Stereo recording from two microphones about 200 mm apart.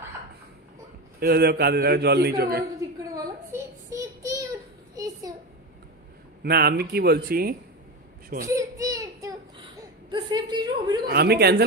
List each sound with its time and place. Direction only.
1.2 s a man's voice: 50° right (ahead or behind)
3.5 s child singing: 15° right (ahead or behind)
4.9 s a sound: 15° right (ahead or behind)
6.4 s a man's voice: 50° right (ahead or behind)
8.5 s a sound: 15° right (ahead or behind)
11.1 s a man's voice: 55° right (ahead or behind)